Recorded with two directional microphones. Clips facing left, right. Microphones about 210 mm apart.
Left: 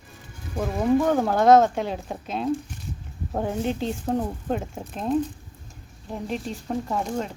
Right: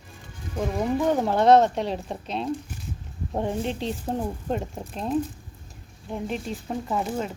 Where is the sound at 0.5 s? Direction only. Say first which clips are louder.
Left 4 dB; centre (ahead or behind).